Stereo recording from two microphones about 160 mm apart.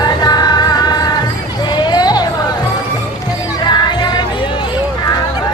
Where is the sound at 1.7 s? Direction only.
25° left (ahead or behind).